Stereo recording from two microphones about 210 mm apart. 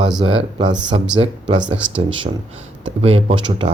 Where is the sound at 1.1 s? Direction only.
25° right (ahead or behind).